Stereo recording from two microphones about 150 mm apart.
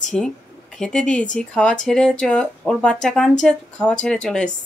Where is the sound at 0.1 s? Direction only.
5° left (ahead or behind).